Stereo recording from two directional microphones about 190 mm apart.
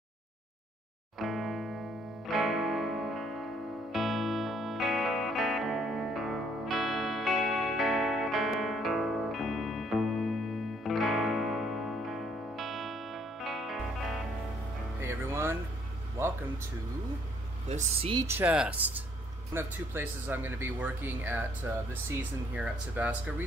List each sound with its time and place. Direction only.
1.2 s music: centre (ahead or behind)
15.0 s music: 10° right (ahead or behind)
16.2 s a sound: 10° right (ahead or behind)
17.6 s speech: 35° right (ahead or behind)
18.1 s speech: 15° right (ahead or behind)
22.5 s speech: 5° right (ahead or behind)